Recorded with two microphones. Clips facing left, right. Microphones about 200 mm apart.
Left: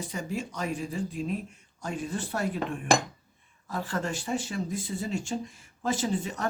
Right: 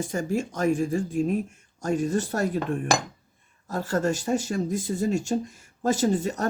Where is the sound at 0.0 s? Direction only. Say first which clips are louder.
Right 7 dB; 45° right (ahead or behind).